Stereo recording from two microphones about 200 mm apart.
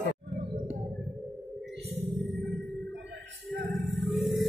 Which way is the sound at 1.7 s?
60° right (ahead or behind).